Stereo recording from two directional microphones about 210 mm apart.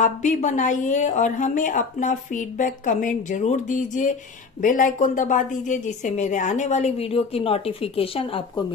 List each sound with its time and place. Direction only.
0.0 s a woman's voice: 35° left (ahead or behind)